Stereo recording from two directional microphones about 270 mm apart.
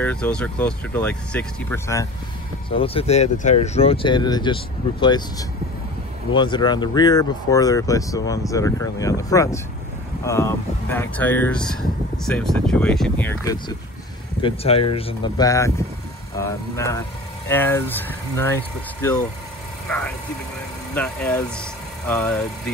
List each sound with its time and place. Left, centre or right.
0.0 s speech: centre
2.7 s speech: left
14.4 s speech: left
20.9 s speech: centre